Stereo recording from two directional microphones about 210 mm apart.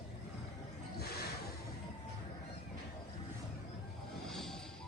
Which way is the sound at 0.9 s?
50° left (ahead or behind).